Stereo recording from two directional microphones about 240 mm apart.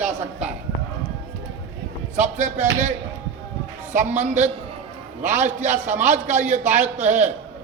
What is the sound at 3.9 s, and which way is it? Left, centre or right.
A man's voice, right.